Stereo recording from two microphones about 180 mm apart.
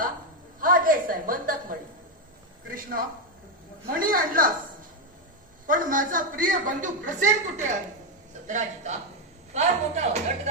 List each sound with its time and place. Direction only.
0.6 s a sound: 50° right (ahead or behind)
2.6 s a woman's voice: 50° right (ahead or behind)
5.6 s a woman's voice: 50° right (ahead or behind)